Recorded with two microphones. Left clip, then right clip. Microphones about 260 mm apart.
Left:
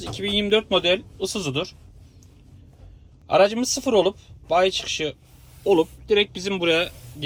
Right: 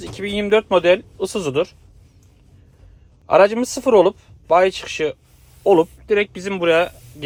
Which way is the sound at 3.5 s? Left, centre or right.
Right.